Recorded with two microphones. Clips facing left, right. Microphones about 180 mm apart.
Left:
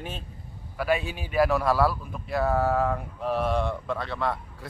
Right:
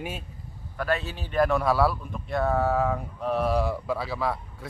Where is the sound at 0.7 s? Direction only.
10° left (ahead or behind).